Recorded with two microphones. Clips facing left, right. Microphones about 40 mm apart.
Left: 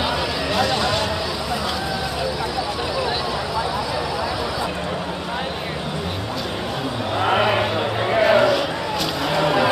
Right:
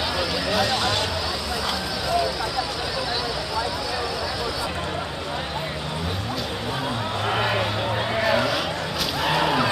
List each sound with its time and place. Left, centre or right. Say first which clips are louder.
0.5 s speech: left 3 dB; centre
7.2 s vehicle: left 5 dB; centre
9.2 s a sound: left 1 dB; centre